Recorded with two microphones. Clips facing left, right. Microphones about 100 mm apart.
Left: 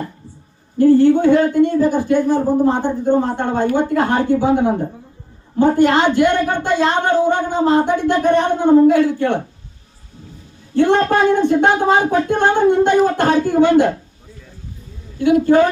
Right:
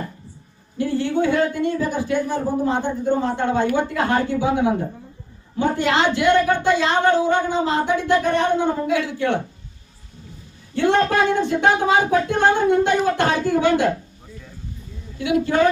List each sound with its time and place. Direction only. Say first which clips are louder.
0.8 s speech: left 10 dB; 45° left (ahead or behind)
10.8 s speech: left 4 dB; 40° left (ahead or behind)
15.2 s speech: left 7 dB; 45° left (ahead or behind)